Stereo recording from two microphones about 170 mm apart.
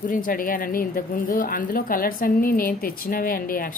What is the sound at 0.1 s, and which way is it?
A woman's voice, 55° left (ahead or behind).